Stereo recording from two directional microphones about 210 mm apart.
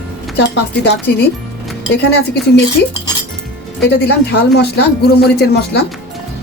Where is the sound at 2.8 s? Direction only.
50° left (ahead or behind).